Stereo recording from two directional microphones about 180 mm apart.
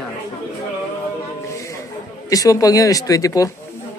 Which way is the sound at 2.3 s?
20° left (ahead or behind).